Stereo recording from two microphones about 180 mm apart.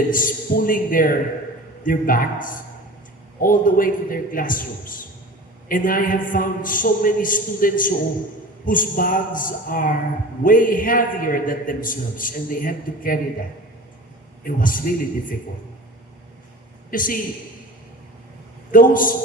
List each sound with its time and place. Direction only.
0.1 s a man's voice: 50° left (ahead or behind)
14.4 s a man's voice: 50° left (ahead or behind)
16.9 s a man's voice: 50° left (ahead or behind)
18.7 s a man's voice: 50° left (ahead or behind)